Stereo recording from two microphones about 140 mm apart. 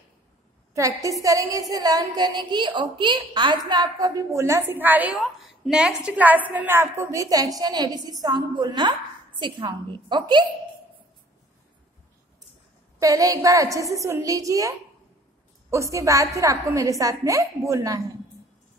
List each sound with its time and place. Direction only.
0.7 s a woman's voice: 25° right (ahead or behind)
5.1 s a woman's voice: centre (ahead or behind); by 10.4 s 35° right (ahead or behind)
13.0 s a woman's voice: 25° right (ahead or behind)
15.7 s a woman's voice: 20° right (ahead or behind)